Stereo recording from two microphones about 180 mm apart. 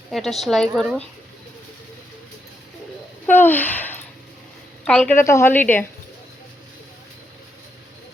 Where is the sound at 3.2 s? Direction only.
10° left (ahead or behind).